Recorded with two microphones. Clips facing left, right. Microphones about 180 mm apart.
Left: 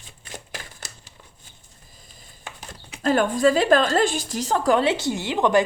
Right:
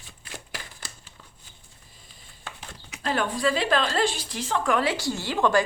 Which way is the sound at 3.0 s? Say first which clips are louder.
Left 7 dB; 45° left (ahead or behind).